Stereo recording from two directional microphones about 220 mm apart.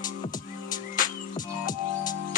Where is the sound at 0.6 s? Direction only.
35° left (ahead or behind).